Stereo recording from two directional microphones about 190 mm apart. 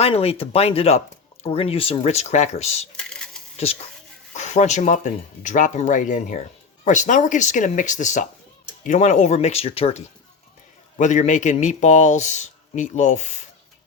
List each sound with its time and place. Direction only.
0.0 s speech: 30° left (ahead or behind)
3.0 s a sound: 5° left (ahead or behind)
4.4 s speech: 40° left (ahead or behind)